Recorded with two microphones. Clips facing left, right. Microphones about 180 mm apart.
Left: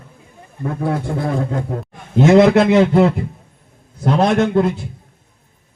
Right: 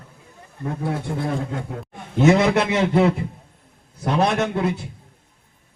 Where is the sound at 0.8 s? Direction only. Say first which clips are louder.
Left 5 dB; 55° left (ahead or behind).